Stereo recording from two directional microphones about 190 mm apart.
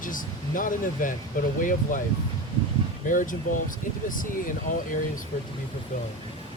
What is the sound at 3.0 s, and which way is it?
Speech, 45° left (ahead or behind).